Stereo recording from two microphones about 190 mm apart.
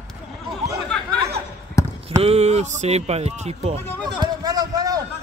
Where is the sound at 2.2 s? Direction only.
35° right (ahead or behind).